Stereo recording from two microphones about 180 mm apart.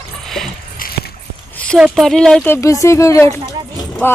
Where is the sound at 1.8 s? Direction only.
Centre (ahead or behind); by 4.1 s 20° left (ahead or behind).